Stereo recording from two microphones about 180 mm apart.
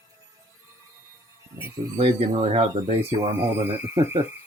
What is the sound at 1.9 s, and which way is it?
Speech, 35° right (ahead or behind).